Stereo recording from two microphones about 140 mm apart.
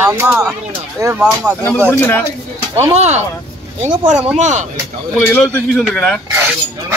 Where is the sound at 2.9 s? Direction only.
55° right (ahead or behind).